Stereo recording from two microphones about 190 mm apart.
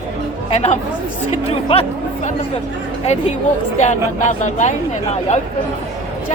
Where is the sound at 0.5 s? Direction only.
35° left (ahead or behind).